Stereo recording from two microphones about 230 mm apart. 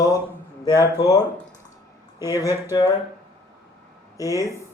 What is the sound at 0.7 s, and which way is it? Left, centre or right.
Speech, centre.